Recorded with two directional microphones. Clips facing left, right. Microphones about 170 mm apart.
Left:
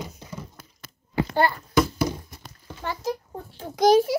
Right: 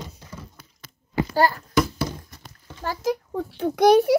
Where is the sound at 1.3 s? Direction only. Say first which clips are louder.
Right 2 dB; 40° right (ahead or behind).